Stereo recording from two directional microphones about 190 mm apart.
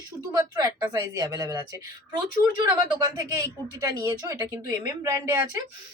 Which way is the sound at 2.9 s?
20° right (ahead or behind).